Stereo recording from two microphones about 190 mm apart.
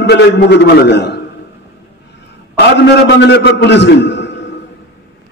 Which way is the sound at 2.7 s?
65° left (ahead or behind).